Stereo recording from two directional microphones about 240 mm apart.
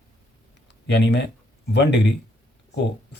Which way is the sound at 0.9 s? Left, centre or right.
Left.